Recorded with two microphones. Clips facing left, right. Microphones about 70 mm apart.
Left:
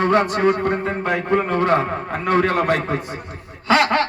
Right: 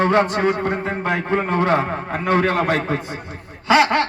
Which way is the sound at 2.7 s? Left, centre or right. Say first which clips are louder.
Even; right.